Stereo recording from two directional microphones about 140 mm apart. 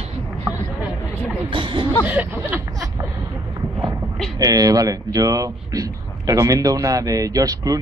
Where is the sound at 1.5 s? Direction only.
35° right (ahead or behind).